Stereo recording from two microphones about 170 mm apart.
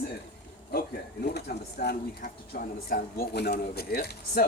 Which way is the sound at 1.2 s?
75° left (ahead or behind).